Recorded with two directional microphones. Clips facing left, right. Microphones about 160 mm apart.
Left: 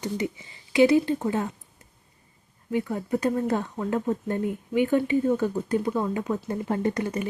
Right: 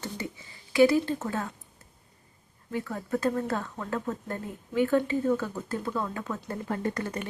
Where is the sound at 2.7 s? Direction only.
15° left (ahead or behind).